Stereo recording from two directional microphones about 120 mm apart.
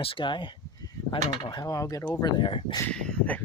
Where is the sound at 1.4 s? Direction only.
30° left (ahead or behind).